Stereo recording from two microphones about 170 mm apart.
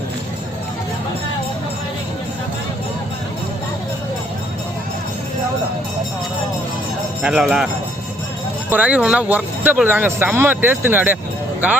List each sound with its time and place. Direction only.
7.2 s speech: 5° right (ahead or behind)
8.7 s speech: 10° right (ahead or behind)